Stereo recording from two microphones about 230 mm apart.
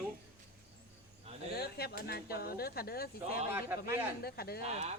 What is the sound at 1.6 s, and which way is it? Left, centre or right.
Speech, left.